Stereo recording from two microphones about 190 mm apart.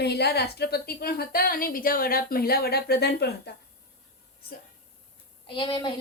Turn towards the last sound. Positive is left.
turn(degrees=25)  # may be behind; listen again after turning